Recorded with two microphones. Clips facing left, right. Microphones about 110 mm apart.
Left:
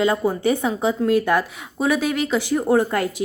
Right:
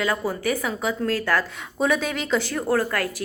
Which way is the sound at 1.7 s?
5° left (ahead or behind).